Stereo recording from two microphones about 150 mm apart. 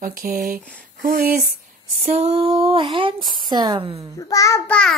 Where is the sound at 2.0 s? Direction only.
45° right (ahead or behind).